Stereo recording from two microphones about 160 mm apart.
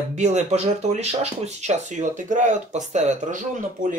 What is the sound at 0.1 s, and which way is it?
Speech, 45° right (ahead or behind).